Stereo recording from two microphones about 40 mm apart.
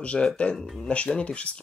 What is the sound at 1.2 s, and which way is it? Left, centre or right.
Speech, left.